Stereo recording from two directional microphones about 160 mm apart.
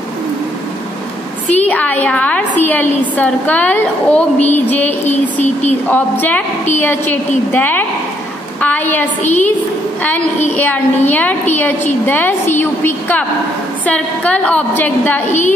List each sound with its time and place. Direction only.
1.5 s a woman's voice: 10° left (ahead or behind)
9.2 s a woman's voice: 45° left (ahead or behind)
10.5 s a woman's voice: 10° left (ahead or behind)